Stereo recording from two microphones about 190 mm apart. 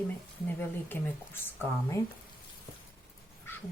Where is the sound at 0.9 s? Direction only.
10° left (ahead or behind).